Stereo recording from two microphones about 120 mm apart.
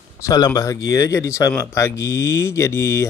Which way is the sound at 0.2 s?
30° left (ahead or behind).